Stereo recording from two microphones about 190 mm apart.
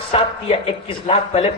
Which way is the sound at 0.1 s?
30° left (ahead or behind).